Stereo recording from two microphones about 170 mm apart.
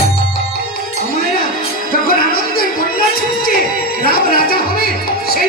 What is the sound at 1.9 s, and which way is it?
Music, 60° left (ahead or behind).